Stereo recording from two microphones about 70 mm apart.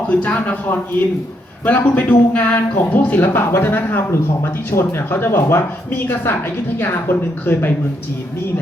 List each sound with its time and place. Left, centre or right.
0.1 s a man's voice: left
3.2 s speech: left